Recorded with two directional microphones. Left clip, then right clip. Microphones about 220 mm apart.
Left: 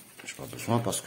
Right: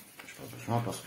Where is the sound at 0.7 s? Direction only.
55° left (ahead or behind).